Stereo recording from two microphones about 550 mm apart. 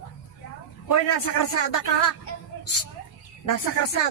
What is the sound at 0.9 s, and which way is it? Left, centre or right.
A man's voice, left.